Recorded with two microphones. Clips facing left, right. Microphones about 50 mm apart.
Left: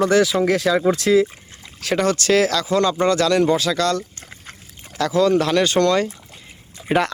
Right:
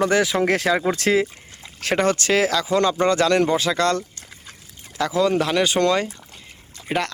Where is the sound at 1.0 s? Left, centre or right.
Right.